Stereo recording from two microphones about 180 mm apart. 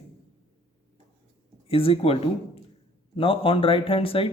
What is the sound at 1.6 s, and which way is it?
Speech, 30° left (ahead or behind).